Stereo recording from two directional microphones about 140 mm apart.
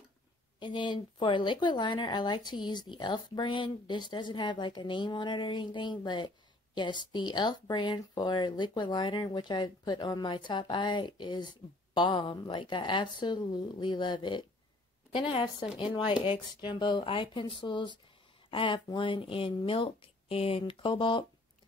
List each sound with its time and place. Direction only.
0.6 s speech: 35° left (ahead or behind)